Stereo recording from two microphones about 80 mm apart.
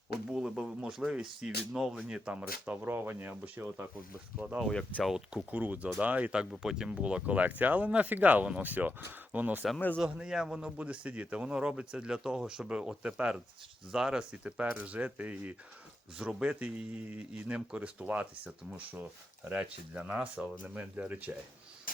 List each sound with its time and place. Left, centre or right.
0.3 s speech: centre; by 3.8 s right
4.7 s speech: centre
5.0 s speech: centre
5.5 s speech: right
10.0 s speech: centre